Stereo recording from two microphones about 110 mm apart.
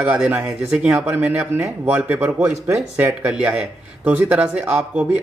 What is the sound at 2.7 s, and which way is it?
Speech, 25° right (ahead or behind).